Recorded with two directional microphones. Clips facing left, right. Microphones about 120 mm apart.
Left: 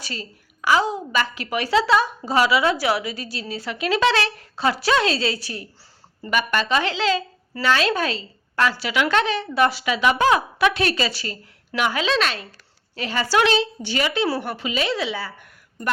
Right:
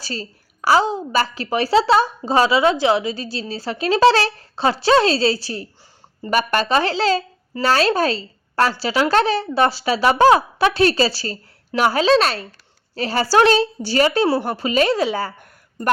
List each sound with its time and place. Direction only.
0.0 s a woman's voice: 35° right (ahead or behind)